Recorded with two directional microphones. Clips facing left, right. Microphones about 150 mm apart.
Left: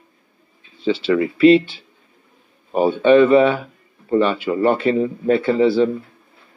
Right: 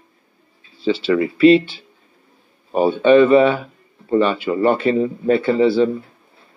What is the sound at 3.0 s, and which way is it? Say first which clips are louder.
Speech: right 1 dB; 30° right (ahead or behind).